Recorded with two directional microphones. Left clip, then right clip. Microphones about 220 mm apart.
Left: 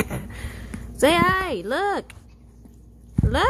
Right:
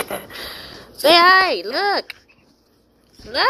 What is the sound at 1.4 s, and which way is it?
Speech, 10° left (ahead or behind).